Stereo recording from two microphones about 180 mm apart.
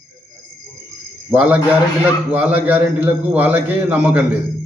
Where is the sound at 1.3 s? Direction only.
10° right (ahead or behind).